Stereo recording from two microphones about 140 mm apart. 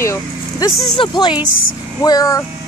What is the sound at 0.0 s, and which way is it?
Speech, 20° left (ahead or behind).